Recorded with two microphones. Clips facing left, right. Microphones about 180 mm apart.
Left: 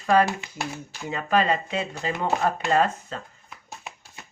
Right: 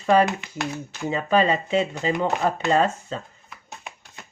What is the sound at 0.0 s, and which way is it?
Speech, 25° right (ahead or behind).